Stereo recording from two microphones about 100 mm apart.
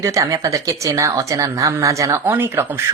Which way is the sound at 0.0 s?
30° right (ahead or behind).